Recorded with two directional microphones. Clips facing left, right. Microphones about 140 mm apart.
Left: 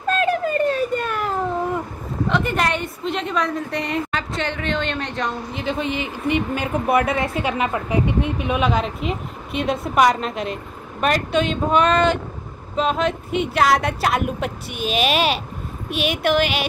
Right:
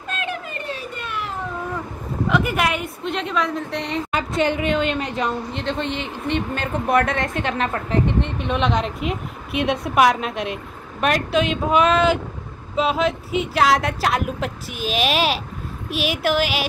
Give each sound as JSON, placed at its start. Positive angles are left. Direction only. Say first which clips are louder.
{"t": 0.1, "sound": "a sound", "louder": "left 9 dB", "side_deg": 40}
{"t": 2.2, "sound": "speech", "louder": "even", "side_deg": -5}
{"t": 4.1, "sound": "a woman's voice", "louder": "right 5 dB", "side_deg": -10}
{"t": 5.6, "sound": "speech", "louder": "left 1 dB", "side_deg": 5}